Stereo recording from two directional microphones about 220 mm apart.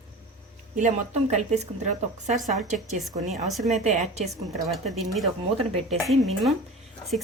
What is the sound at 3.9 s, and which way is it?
Speech, 30° right (ahead or behind).